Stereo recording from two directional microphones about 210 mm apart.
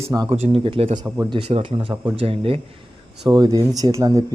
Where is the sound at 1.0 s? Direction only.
20° right (ahead or behind).